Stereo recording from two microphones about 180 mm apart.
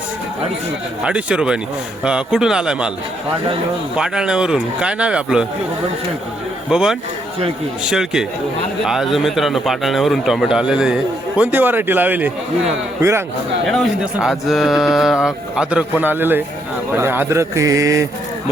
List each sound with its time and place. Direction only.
1.0 s a man's voice: 5° right (ahead or behind)
3.9 s a man's voice: 5° right (ahead or behind)
6.7 s a man's voice: 5° right (ahead or behind)
13.7 s a man's voice: centre (ahead or behind); by 18.1 s 20° right (ahead or behind)